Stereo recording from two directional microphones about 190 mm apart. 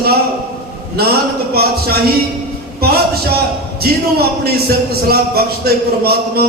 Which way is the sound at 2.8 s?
55° right (ahead or behind).